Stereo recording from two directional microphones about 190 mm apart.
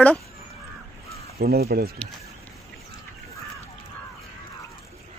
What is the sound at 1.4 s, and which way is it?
Speech, 55° right (ahead or behind).